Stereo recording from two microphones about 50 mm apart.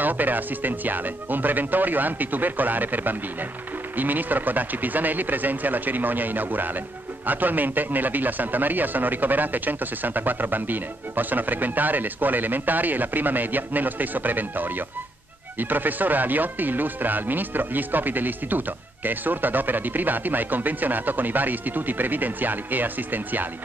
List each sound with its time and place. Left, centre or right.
0.0 s speech: right